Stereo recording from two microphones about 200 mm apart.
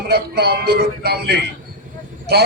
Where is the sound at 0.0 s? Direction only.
55° right (ahead or behind).